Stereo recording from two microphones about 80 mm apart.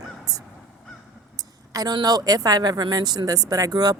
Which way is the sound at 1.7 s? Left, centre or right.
Right.